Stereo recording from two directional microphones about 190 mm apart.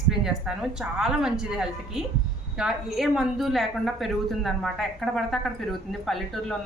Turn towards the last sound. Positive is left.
turn(degrees=0)  # may be behind; listen again after turning